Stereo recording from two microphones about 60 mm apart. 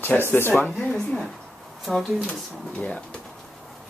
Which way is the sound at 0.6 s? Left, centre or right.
Centre.